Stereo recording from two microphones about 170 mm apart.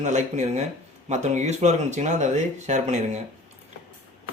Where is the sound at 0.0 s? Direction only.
45° right (ahead or behind).